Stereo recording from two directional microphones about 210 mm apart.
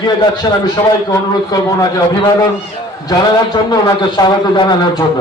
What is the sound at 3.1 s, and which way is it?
A man's voice, 20° left (ahead or behind).